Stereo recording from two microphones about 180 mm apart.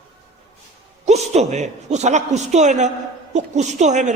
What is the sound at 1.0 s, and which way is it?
A man's voice, 35° right (ahead or behind).